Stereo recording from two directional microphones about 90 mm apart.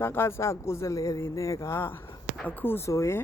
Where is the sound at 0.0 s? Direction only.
25° left (ahead or behind).